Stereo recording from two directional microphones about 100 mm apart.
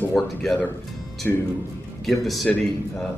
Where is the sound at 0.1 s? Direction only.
Centre (ahead or behind).